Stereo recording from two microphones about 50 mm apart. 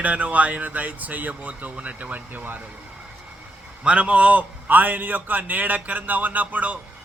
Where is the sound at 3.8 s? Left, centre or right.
Right.